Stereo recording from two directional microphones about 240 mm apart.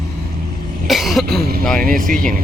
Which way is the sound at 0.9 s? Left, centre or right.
Centre.